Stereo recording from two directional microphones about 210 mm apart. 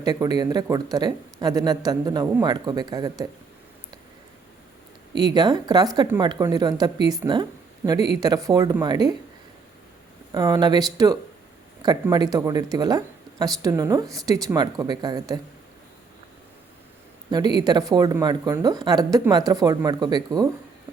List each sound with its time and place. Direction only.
0.0 s speech: 20° right (ahead or behind)
5.1 s speech: 20° right (ahead or behind)
10.3 s speech: 20° right (ahead or behind)
17.3 s speech: 20° right (ahead or behind)